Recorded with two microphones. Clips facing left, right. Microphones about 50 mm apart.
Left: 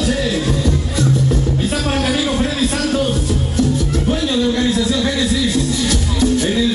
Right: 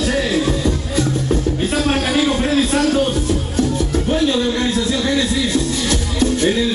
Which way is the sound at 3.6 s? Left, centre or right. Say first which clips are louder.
Left 1 dB; right.